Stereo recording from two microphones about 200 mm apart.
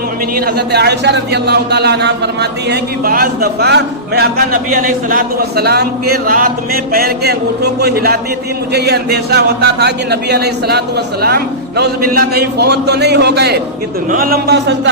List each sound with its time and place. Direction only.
0.3 s a man's voice: 50° right (ahead or behind)